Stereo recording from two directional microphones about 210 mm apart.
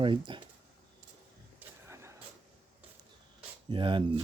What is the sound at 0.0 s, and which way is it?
Speech, 25° right (ahead or behind).